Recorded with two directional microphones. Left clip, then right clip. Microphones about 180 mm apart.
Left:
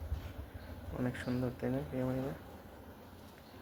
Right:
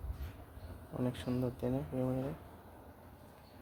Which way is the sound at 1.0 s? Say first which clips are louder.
Even; 20° right (ahead or behind).